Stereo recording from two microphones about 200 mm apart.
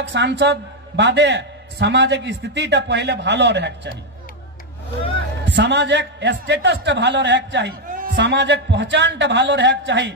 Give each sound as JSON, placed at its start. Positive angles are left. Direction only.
{"t": 0.1, "sound": "a man's voice", "side_deg": -60}
{"t": 5.1, "sound": "a man's voice", "side_deg": -60}
{"t": 7.9, "sound": "a man's voice", "side_deg": -50}